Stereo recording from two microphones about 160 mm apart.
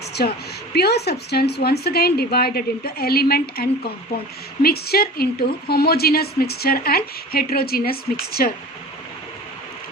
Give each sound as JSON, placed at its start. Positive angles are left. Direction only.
{"t": 0.2, "sound": "a woman's voice", "side_deg": 85}